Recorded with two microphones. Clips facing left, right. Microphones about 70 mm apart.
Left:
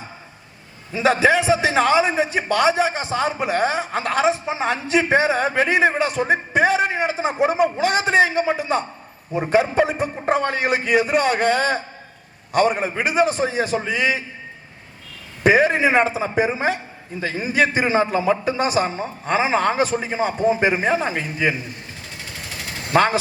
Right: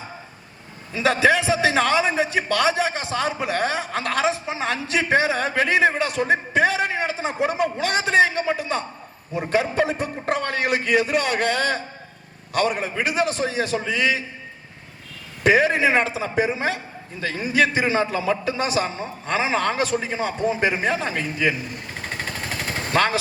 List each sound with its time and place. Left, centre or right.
0.9 s a man's voice: left
15.4 s a man's voice: left
21.9 s vehicle: right
22.9 s speech: centre